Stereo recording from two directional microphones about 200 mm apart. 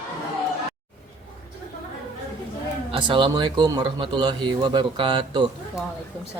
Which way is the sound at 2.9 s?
25° right (ahead or behind).